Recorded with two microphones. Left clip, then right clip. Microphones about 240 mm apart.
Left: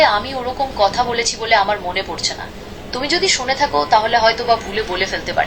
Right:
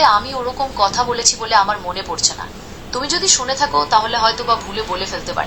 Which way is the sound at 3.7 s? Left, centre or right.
Right.